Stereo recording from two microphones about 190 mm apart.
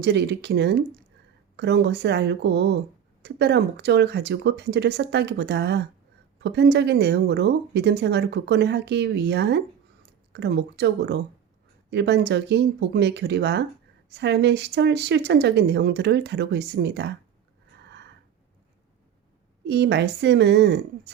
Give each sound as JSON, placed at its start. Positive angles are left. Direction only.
{"t": 0.0, "sound": "speech", "side_deg": -65}
{"t": 19.6, "sound": "speech", "side_deg": -60}